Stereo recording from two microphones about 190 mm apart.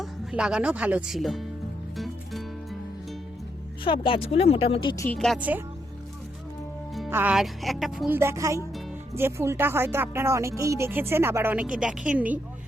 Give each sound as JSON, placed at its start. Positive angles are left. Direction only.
{"t": 0.0, "sound": "speech", "side_deg": -5}
{"t": 2.0, "sound": "music", "side_deg": 0}
{"t": 3.8, "sound": "speech", "side_deg": 25}
{"t": 5.0, "sound": "a woman's voice", "side_deg": 0}
{"t": 5.4, "sound": "speech", "side_deg": -10}
{"t": 7.1, "sound": "speech", "side_deg": -10}